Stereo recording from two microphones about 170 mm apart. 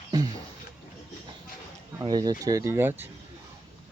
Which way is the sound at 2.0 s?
25° right (ahead or behind).